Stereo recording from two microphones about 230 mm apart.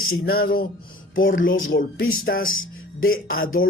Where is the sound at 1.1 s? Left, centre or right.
Left.